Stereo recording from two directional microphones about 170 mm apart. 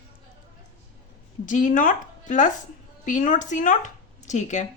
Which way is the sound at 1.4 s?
45° left (ahead or behind).